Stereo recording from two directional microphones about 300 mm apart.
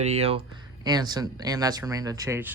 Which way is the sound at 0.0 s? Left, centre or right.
Right.